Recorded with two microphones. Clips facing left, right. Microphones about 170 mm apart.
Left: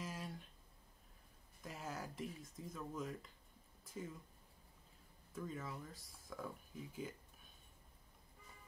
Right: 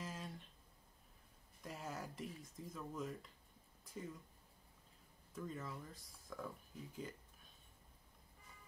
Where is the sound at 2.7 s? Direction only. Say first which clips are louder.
Even; centre (ahead or behind).